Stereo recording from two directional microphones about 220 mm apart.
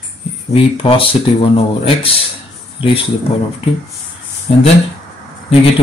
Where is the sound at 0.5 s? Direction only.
25° left (ahead or behind).